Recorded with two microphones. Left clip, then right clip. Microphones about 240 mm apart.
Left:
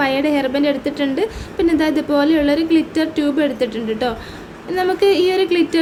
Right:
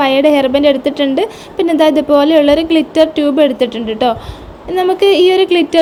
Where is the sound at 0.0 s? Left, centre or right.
Right.